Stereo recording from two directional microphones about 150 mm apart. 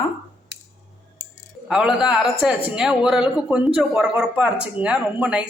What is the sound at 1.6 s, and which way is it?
A woman's voice, 5° right (ahead or behind).